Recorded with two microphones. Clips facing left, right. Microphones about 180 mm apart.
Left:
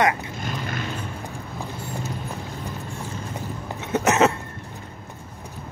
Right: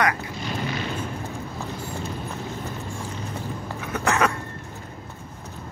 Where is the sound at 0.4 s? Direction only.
50° left (ahead or behind).